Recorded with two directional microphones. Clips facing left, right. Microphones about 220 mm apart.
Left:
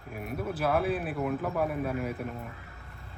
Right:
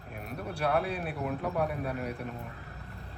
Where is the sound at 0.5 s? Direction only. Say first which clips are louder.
Left 2 dB; centre (ahead or behind).